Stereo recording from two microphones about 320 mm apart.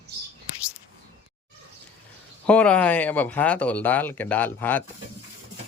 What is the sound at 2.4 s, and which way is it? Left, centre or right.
Speech, centre.